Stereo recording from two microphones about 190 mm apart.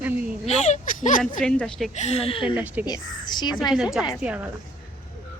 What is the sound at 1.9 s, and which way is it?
Speech, 35° left (ahead or behind).